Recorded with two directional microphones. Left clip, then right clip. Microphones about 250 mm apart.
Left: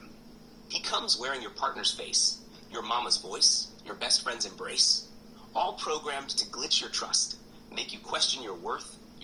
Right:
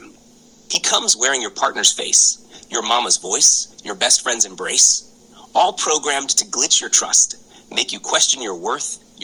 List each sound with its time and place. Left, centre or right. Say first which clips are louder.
0.7 s a man's voice: right 12 dB; right